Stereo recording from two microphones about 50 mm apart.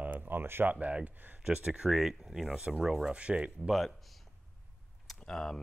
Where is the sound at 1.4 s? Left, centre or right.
Centre.